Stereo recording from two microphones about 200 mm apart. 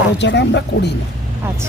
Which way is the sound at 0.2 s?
60° left (ahead or behind).